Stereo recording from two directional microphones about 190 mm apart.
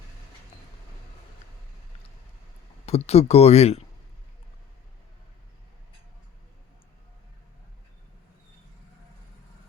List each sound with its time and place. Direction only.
2.8 s speech: 35° left (ahead or behind)